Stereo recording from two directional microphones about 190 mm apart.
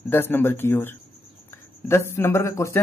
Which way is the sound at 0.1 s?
10° left (ahead or behind).